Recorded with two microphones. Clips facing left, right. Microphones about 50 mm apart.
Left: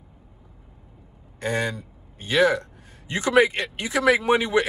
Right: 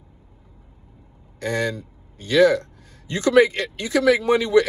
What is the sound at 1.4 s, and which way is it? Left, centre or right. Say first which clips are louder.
Speech: right 2 dB; left.